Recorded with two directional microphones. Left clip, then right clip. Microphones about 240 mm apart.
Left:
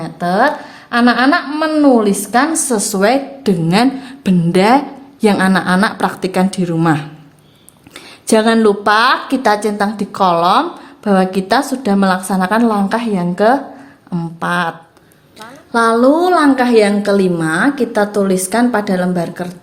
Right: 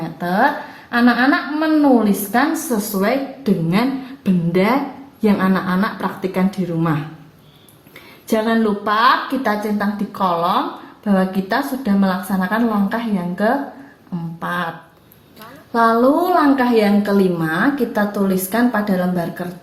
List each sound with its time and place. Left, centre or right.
0.0 s a woman's voice: left
8.3 s a woman's voice: left